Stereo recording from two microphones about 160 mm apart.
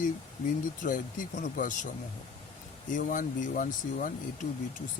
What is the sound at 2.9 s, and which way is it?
Speech, 55° left (ahead or behind).